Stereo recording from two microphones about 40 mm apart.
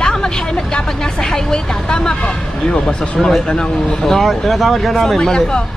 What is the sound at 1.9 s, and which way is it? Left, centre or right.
Vehicle, centre.